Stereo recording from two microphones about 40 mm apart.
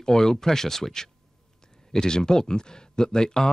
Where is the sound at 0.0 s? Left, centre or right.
Centre.